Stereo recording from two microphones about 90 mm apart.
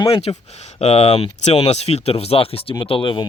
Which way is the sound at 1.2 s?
90° left.